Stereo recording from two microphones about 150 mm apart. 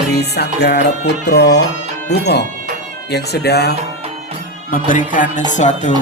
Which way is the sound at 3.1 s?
90° left.